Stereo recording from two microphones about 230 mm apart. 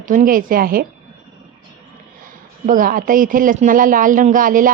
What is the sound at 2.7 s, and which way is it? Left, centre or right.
A woman's voice, right.